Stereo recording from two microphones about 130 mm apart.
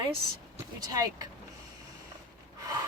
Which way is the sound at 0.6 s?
25° right (ahead or behind).